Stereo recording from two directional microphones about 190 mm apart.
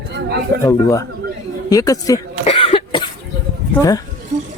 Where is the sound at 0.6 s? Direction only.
15° left (ahead or behind).